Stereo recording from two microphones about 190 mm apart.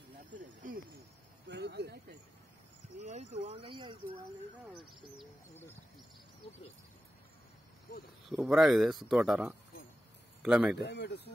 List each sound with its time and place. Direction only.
0.3 s snake: 45° right (ahead or behind)
1.5 s speech: 60° right (ahead or behind)
3.0 s speech: 35° right (ahead or behind)
8.3 s speech: 5° right (ahead or behind)
10.8 s speech: 65° left (ahead or behind)